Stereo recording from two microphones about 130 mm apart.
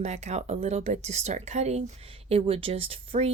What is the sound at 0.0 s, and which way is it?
Speech, 55° right (ahead or behind).